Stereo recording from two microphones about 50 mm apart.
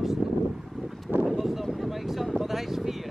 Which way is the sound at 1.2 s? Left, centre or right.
Centre.